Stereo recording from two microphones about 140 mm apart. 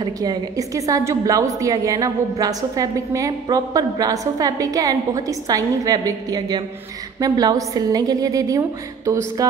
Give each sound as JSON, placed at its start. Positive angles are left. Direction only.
{"t": 0.0, "sound": "a woman's voice", "side_deg": -30}